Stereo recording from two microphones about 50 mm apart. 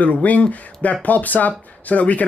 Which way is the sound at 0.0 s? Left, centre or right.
Left.